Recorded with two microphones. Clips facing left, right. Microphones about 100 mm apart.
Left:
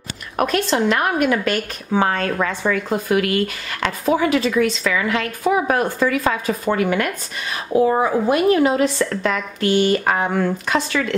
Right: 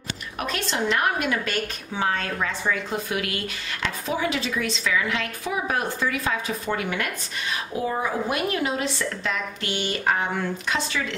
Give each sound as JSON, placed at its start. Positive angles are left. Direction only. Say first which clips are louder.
{"t": 0.4, "sound": "a woman's voice", "louder": "left 9 dB", "side_deg": 55}